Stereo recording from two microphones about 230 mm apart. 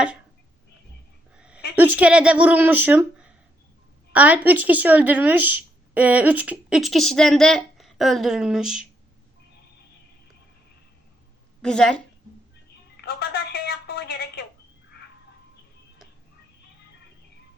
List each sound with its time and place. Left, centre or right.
1.4 s a sound: centre
1.7 s speech: centre
11.6 s speech: centre
13.0 s telephone: left